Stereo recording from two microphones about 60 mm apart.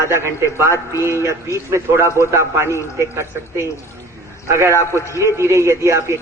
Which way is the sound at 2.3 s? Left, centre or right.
Right.